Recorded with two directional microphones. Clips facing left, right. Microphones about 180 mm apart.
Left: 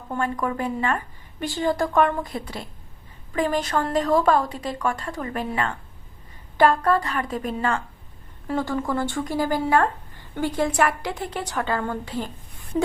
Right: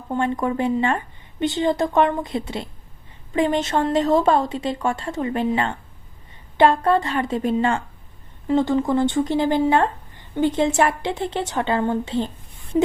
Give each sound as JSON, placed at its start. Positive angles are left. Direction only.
{"t": 0.1, "sound": "a woman's voice", "side_deg": -25}